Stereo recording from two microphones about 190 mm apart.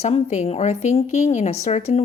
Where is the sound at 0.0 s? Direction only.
35° left (ahead or behind).